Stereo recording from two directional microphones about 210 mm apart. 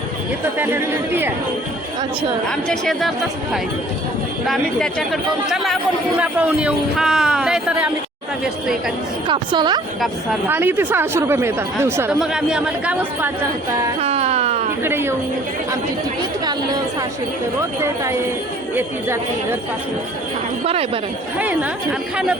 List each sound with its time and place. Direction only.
0.6 s speech: 10° right (ahead or behind)
2.5 s speech: centre (ahead or behind)
4.4 s speech: centre (ahead or behind)
9.2 s a woman's voice: 20° right (ahead or behind)
10.5 s speech: 10° right (ahead or behind)
14.0 s music: 30° right (ahead or behind)
14.8 s speech: 10° right (ahead or behind)
16.5 s a woman's voice: 20° right (ahead or behind)
20.7 s a woman's voice: 25° right (ahead or behind)
21.3 s speech: 5° right (ahead or behind)